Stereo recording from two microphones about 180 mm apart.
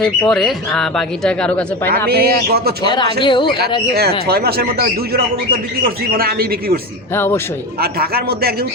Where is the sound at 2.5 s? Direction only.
60° right (ahead or behind).